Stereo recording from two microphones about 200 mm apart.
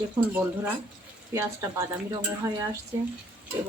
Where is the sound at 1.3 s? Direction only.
15° right (ahead or behind).